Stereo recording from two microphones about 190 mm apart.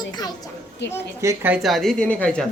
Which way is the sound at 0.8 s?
65° left (ahead or behind).